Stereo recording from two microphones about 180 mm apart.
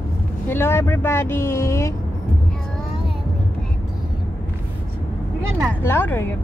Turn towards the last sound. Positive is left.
turn(degrees=15)  # may be behind; listen again after turning